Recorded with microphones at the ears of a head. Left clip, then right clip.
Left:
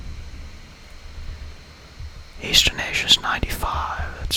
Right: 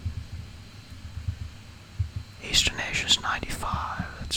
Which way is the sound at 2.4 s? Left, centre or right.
Left.